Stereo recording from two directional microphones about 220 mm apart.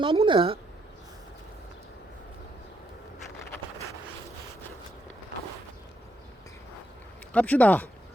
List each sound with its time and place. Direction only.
0.0 s speech: 20° right (ahead or behind)
7.3 s speech: 5° left (ahead or behind)